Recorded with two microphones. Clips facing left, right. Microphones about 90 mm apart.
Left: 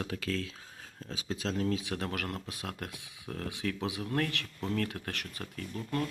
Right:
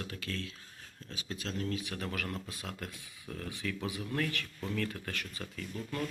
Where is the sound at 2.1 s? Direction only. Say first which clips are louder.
Left 2 dB; 70° left (ahead or behind).